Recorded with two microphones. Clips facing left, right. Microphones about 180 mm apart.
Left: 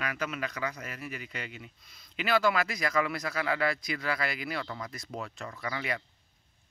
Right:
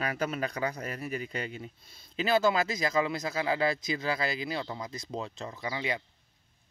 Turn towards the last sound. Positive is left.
turn(degrees=-20)  # may be behind; listen again after turning